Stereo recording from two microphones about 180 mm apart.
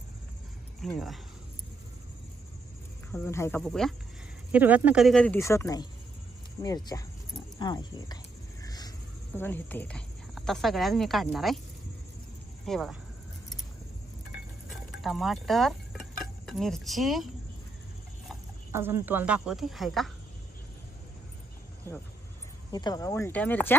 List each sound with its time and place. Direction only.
0.8 s a woman's voice: centre (ahead or behind)
3.1 s speech: 15° left (ahead or behind)
3.6 s a woman's voice: centre (ahead or behind)
4.5 s a woman's voice: 10° right (ahead or behind); by 8.2 s 20° left (ahead or behind)
8.6 s a sound: 20° left (ahead or behind)
9.3 s a woman's voice: 10° left (ahead or behind)
12.6 s a woman's voice: centre (ahead or behind)
15.0 s speech: centre (ahead or behind)
18.7 s speech: 15° right (ahead or behind)
22.7 s speech: 20° left (ahead or behind)